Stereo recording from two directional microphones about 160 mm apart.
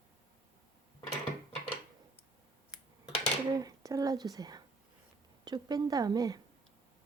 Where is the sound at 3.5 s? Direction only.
25° right (ahead or behind).